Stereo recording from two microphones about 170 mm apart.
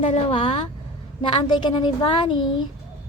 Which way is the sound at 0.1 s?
30° left (ahead or behind).